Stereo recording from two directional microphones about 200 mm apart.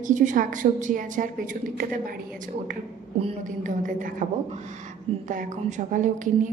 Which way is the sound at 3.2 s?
40° right (ahead or behind).